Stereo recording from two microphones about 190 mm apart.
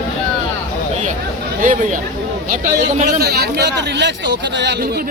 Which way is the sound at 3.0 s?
55° right (ahead or behind).